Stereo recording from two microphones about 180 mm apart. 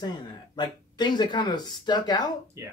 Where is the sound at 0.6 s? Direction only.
25° left (ahead or behind).